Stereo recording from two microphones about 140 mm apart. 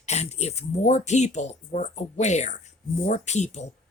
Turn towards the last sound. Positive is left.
turn(degrees=55)  # may be behind; listen again after turning